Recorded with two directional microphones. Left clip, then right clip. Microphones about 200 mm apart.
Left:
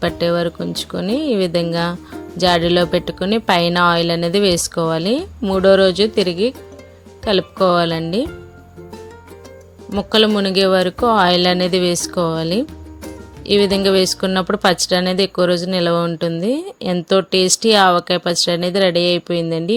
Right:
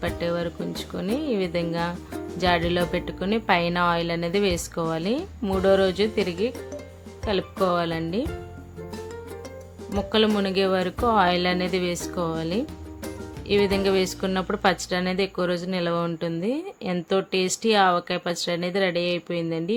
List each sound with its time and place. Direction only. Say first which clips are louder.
0.2 s speech: left 9 dB; 30° left (ahead or behind)
10.0 s speech: left 8 dB; 30° left (ahead or behind)